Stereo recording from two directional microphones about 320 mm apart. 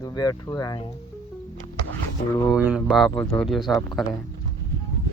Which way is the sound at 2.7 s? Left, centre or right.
Centre.